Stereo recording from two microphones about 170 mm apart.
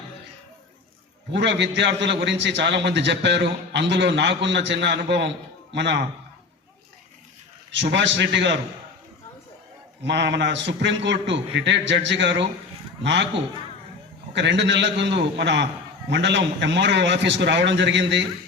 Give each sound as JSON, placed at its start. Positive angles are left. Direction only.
{"t": 1.3, "sound": "a man's voice", "side_deg": -90}
{"t": 7.7, "sound": "a man's voice", "side_deg": -90}
{"t": 10.0, "sound": "a man's voice", "side_deg": -90}
{"t": 14.3, "sound": "a man's voice", "side_deg": -90}